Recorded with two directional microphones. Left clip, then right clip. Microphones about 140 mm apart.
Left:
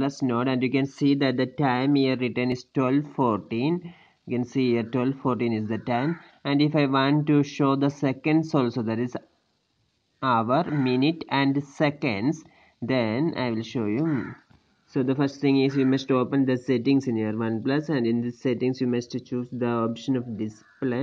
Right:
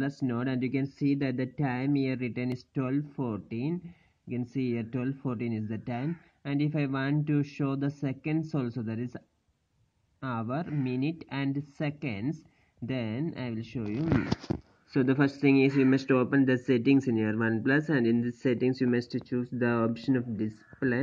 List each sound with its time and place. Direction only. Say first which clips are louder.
0.2 s speech: left 7 dB; 25° left (ahead or behind)
3.0 s speech: left 11 dB; 40° left (ahead or behind)
3.8 s speech: left 7 dB; 30° left (ahead or behind)
10.2 s speech: left 12 dB; 20° left (ahead or behind)